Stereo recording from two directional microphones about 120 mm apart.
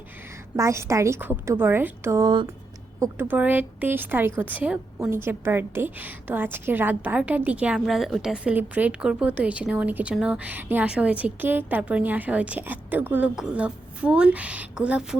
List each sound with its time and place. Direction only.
0.5 s a woman's voice: 25° right (ahead or behind)